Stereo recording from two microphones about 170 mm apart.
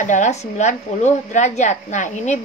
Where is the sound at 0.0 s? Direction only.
45° left (ahead or behind).